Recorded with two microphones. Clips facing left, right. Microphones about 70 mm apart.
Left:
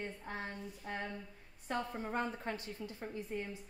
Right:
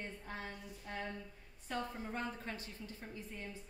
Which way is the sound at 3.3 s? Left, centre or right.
Left.